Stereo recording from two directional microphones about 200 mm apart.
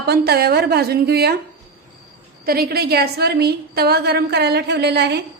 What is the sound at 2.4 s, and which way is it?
A woman's voice, 50° right (ahead or behind).